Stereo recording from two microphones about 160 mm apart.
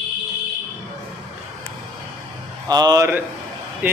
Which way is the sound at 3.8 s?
10° right (ahead or behind).